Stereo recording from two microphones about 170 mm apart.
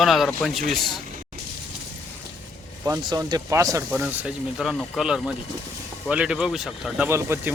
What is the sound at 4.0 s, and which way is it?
Speech, 5° right (ahead or behind).